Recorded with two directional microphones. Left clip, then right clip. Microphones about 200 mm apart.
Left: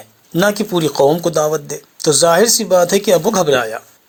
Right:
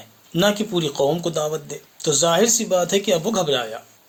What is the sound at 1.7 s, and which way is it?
Speech, 20° left (ahead or behind).